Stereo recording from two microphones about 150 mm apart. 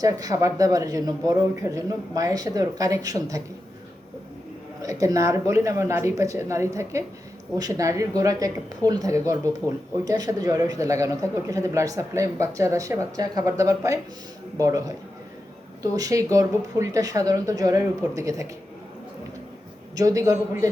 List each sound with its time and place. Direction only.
0.0 s speech: 25° right (ahead or behind)
4.8 s speech: 20° right (ahead or behind)
20.0 s speech: 25° right (ahead or behind)